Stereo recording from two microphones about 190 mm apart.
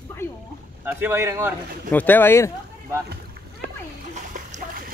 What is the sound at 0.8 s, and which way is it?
Speech, 10° right (ahead or behind).